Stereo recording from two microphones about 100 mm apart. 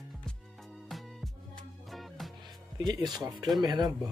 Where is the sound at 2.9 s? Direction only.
40° right (ahead or behind).